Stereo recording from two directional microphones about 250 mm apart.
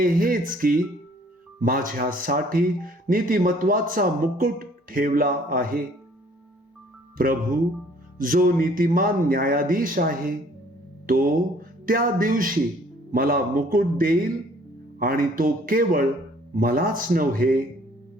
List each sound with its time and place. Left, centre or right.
0.0 s speech: right
7.2 s speech: right